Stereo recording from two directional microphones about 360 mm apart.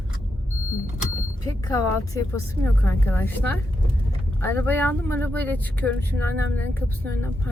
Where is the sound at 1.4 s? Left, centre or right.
Centre.